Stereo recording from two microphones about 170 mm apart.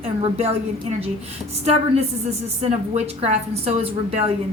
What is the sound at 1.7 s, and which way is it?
A woman's voice, 40° right (ahead or behind).